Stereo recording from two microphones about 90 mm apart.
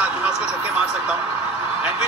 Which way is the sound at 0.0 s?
15° right (ahead or behind).